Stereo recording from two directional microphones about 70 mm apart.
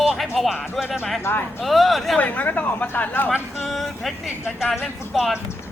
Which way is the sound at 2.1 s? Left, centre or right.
Left.